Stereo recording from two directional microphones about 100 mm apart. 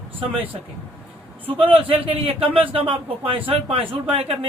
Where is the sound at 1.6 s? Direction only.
65° right (ahead or behind).